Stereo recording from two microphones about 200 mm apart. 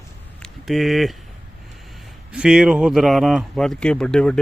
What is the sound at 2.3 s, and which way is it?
A man's voice, 5° right (ahead or behind).